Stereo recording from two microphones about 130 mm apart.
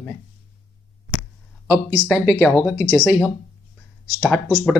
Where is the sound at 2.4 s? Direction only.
15° left (ahead or behind).